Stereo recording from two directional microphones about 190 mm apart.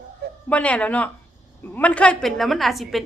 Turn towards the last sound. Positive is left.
turn(degrees=0)  # may be behind; listen again after turning